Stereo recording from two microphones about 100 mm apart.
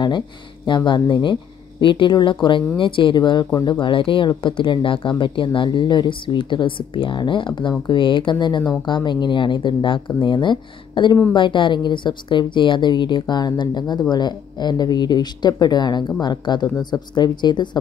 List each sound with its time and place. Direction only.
0.7 s a woman's voice: 50° left (ahead or behind)